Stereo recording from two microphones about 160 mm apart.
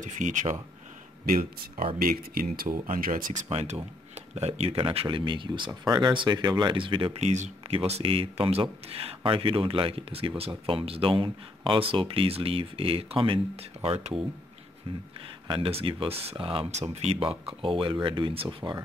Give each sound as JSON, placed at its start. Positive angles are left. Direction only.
{"t": 0.0, "sound": "speech", "side_deg": -50}
{"t": 1.2, "sound": "speech", "side_deg": -65}
{"t": 3.4, "sound": "speech", "side_deg": -40}
{"t": 15.4, "sound": "speech", "side_deg": -35}